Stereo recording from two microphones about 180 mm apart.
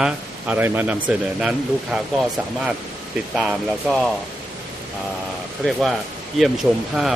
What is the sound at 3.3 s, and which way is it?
Speech, centre (ahead or behind).